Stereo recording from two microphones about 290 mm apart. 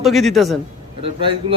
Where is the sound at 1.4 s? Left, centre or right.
Centre.